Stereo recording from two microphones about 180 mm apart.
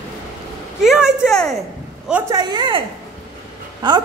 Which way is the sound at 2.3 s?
25° right (ahead or behind).